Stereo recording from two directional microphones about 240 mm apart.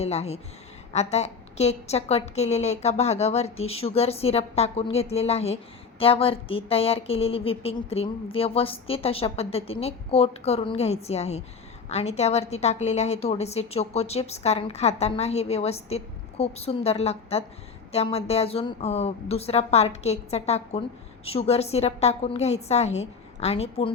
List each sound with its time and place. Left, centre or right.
0.0 s a woman's voice: left